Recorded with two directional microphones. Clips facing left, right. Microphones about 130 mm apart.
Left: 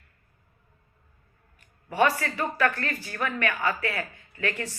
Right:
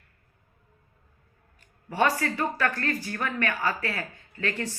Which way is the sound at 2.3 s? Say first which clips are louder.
Left 1 dB; 30° right (ahead or behind).